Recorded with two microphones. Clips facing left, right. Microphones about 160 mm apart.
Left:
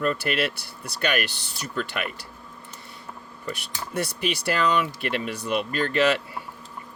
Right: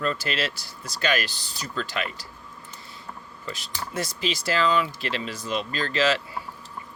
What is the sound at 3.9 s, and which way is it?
Speech, 65° left (ahead or behind).